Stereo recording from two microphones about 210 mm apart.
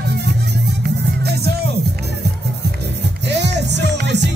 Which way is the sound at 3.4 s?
55° right (ahead or behind).